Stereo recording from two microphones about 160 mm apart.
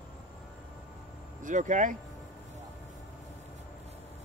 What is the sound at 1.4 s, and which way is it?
Speech, 50° right (ahead or behind).